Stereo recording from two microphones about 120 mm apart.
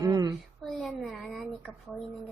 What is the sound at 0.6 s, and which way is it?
A woman's voice, centre (ahead or behind).